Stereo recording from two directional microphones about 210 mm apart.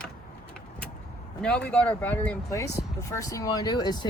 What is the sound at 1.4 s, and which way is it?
Speech, 5° left (ahead or behind).